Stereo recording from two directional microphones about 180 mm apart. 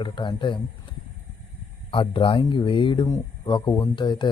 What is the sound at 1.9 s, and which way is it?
Speech, 30° left (ahead or behind).